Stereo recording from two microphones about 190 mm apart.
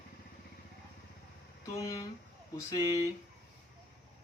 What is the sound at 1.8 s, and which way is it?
Speech, 15° left (ahead or behind).